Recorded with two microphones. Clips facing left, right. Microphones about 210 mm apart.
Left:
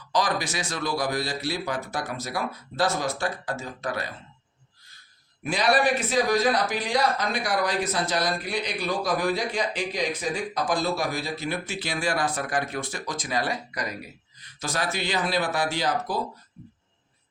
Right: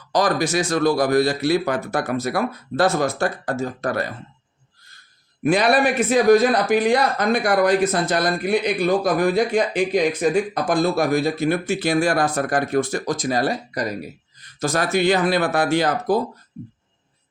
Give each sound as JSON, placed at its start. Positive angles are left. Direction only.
{"t": 0.1, "sound": "a man's voice", "side_deg": -45}
{"t": 5.4, "sound": "a man's voice", "side_deg": -55}
{"t": 14.6, "sound": "a man's voice", "side_deg": -50}